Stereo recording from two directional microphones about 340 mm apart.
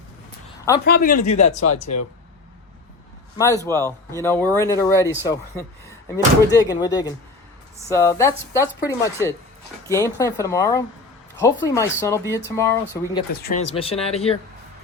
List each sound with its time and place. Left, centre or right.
0.9 s speech: left
1.6 s speech: left
3.3 s speech: centre
6.5 s speech: centre
13.4 s speech: left